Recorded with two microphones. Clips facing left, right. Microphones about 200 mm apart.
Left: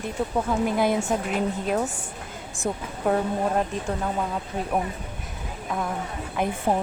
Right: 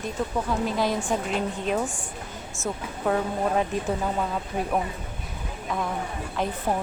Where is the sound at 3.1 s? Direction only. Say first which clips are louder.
Left 1 dB; centre (ahead or behind).